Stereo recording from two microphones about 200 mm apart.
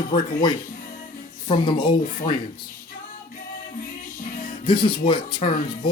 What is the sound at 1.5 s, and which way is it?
Speech, 20° left (ahead or behind).